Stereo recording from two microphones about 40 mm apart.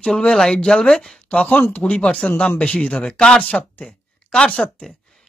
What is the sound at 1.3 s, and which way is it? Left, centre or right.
Speech, left.